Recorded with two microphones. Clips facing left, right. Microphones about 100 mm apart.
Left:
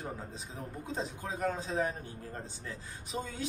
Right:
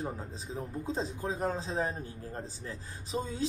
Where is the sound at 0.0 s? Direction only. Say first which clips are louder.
Right 3 dB; 30° right (ahead or behind).